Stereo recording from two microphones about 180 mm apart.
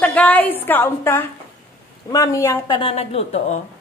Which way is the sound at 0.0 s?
10° left (ahead or behind).